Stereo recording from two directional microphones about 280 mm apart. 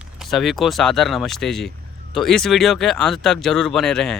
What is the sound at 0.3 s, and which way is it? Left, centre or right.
Speech, centre.